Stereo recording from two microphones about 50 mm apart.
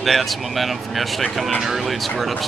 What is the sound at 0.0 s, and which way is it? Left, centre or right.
Speech, centre.